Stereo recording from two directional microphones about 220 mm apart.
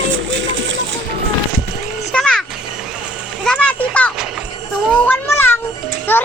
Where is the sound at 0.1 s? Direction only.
55° right (ahead or behind).